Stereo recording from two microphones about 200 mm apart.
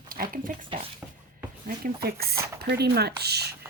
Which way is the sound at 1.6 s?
50° right (ahead or behind).